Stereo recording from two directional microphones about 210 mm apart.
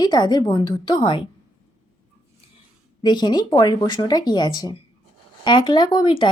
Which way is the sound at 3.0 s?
20° left (ahead or behind).